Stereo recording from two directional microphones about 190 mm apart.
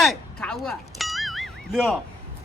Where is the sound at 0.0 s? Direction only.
Centre (ahead or behind).